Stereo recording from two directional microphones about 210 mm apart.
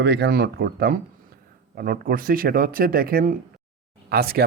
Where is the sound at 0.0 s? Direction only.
55° right (ahead or behind).